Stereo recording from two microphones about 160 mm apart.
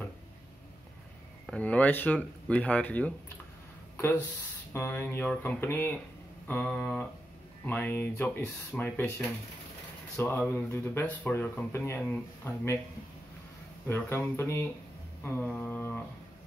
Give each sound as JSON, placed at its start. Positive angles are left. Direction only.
{"t": 1.4, "sound": "speech", "side_deg": 5}
{"t": 10.1, "sound": "speech", "side_deg": 15}
{"t": 13.8, "sound": "speech", "side_deg": 15}